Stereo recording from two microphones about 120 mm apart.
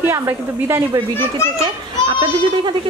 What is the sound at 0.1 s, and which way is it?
Speech, 25° right (ahead or behind).